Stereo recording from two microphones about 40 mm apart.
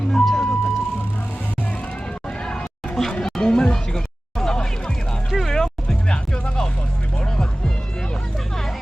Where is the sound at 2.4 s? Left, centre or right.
Left.